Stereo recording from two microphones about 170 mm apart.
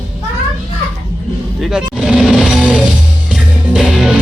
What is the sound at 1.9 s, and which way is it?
Music, 5° right (ahead or behind).